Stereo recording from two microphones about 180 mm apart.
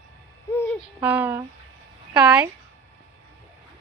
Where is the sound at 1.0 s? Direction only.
10° right (ahead or behind).